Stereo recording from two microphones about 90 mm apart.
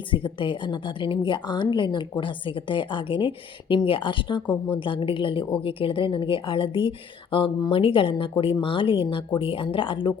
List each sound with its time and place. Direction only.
0.1 s a woman's voice: 70° left (ahead or behind)
7.7 s a woman's voice: 85° left